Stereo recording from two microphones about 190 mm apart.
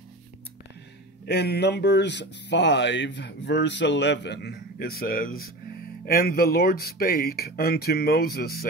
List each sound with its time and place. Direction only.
1.2 s speech: 60° left (ahead or behind)